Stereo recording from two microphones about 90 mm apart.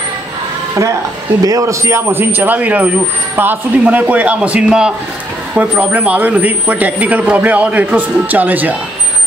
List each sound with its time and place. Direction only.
1.4 s speech: 40° right (ahead or behind); by 8.7 s 20° right (ahead or behind)